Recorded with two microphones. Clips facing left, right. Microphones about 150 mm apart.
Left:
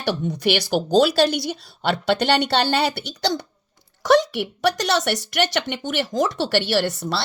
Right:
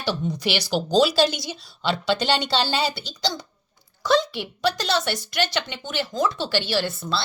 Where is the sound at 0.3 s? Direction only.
55° left (ahead or behind).